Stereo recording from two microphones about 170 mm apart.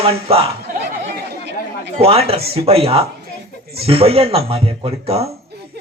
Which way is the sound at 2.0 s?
35° right (ahead or behind).